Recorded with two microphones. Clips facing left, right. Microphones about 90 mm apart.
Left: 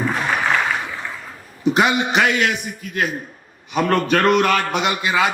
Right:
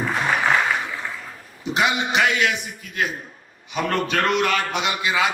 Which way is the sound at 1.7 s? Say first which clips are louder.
Left 2 dB; 50° left (ahead or behind).